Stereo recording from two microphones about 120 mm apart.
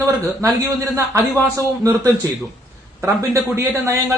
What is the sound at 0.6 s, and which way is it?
Speech, 25° right (ahead or behind).